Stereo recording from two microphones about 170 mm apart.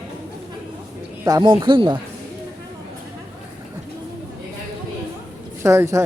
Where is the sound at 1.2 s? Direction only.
25° right (ahead or behind).